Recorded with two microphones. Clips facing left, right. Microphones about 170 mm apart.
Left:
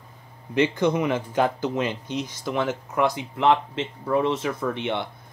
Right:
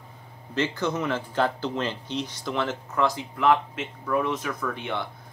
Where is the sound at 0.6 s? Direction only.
15° left (ahead or behind).